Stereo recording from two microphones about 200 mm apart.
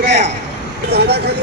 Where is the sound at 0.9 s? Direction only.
55° right (ahead or behind).